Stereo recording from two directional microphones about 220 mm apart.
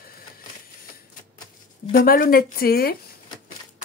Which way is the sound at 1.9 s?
40° left (ahead or behind).